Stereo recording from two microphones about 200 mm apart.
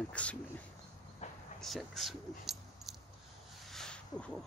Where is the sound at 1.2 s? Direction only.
35° left (ahead or behind).